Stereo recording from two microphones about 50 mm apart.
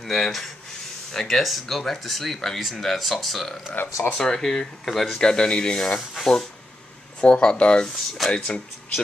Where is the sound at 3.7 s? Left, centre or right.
Left.